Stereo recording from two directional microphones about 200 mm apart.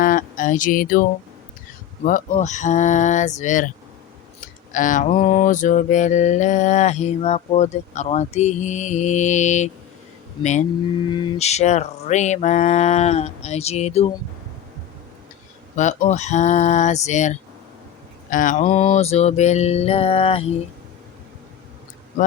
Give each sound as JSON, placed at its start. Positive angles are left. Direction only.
{"t": 0.0, "sound": "a sound", "side_deg": 40}
{"t": 2.0, "sound": "mantra", "side_deg": 40}
{"t": 4.7, "sound": "mantra", "side_deg": 40}
{"t": 11.3, "sound": "mantra", "side_deg": 35}
{"t": 15.7, "sound": "mantra", "side_deg": 35}